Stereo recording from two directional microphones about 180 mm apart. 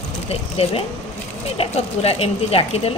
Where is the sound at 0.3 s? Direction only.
35° left (ahead or behind).